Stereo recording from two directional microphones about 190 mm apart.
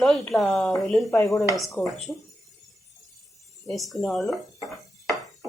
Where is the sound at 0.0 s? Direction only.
Centre (ahead or behind).